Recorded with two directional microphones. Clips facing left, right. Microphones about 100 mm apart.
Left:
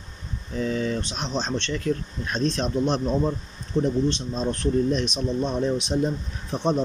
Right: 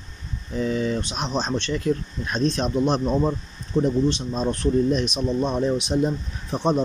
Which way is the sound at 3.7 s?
45° right (ahead or behind).